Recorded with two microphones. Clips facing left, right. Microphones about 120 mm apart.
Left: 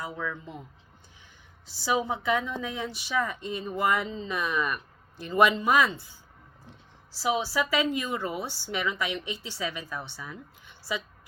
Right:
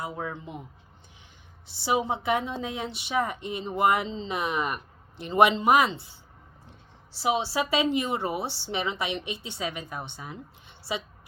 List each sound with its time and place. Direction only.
0.3 s a woman's voice: 20° right (ahead or behind)
1.6 s a woman's voice: 20° right (ahead or behind)
7.2 s a woman's voice: 25° right (ahead or behind)